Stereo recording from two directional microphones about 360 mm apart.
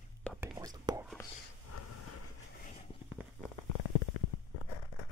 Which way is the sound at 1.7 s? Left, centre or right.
Left.